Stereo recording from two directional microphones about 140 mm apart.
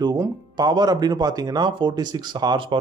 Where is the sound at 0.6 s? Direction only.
30° right (ahead or behind).